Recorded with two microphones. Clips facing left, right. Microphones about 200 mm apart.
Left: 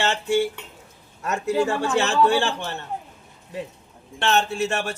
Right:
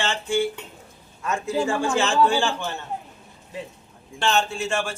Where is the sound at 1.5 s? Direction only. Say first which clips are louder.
Left 2 dB; 65° left (ahead or behind).